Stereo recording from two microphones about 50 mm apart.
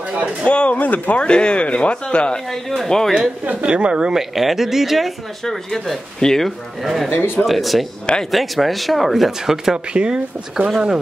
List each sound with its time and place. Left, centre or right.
0.5 s speech: left
1.2 s speech: centre
2.5 s speech: centre
3.6 s speech: right
4.1 s speech: centre
7.1 s speech: left
7.4 s speech: centre
9.9 s speech: centre